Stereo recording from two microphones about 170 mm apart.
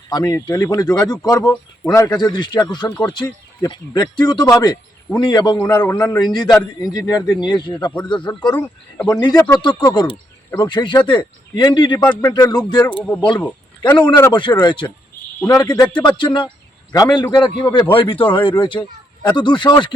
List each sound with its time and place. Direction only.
0.1 s speech: 25° left (ahead or behind)
5.6 s speech: 10° left (ahead or behind)
8.5 s speech: 10° left (ahead or behind)
9.2 s speech: 20° left (ahead or behind)
13.0 s speech: 5° left (ahead or behind)
13.8 s speech: 25° left (ahead or behind)
16.0 s speech: 25° left (ahead or behind)